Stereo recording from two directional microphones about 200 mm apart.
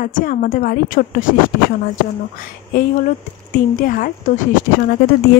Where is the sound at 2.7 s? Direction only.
45° left (ahead or behind).